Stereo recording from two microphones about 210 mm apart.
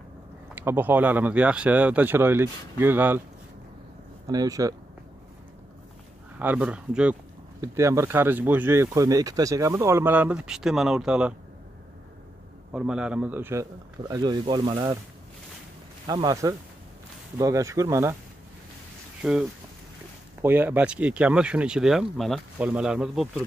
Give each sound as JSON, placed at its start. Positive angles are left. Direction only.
{"t": 0.6, "sound": "speech", "side_deg": -10}
{"t": 4.3, "sound": "speech", "side_deg": -15}
{"t": 6.4, "sound": "speech", "side_deg": -5}
{"t": 12.7, "sound": "speech", "side_deg": -5}
{"t": 16.1, "sound": "speech", "side_deg": -20}
{"t": 20.4, "sound": "speech", "side_deg": -10}